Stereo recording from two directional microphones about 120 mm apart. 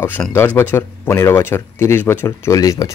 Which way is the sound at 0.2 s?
10° left (ahead or behind).